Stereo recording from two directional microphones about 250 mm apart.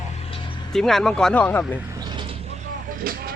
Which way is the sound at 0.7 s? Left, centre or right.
Centre.